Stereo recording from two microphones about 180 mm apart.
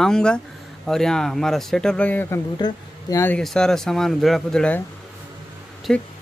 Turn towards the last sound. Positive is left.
turn(degrees=0)  # may be behind; listen again after turning